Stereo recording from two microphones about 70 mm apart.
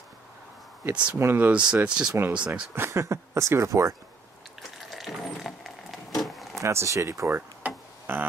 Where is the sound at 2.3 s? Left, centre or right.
Centre.